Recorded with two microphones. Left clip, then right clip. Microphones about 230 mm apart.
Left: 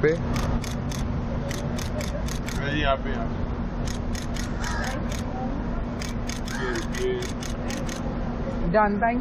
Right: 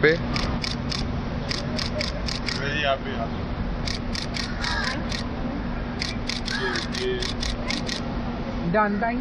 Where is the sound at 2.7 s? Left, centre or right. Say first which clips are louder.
Even; left.